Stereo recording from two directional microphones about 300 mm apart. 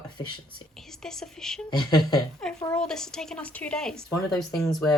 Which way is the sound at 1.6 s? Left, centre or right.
Centre.